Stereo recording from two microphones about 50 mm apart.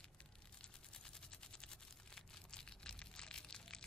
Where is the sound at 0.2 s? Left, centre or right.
Centre.